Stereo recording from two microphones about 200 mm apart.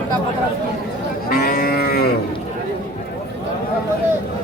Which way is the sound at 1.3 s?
45° left (ahead or behind).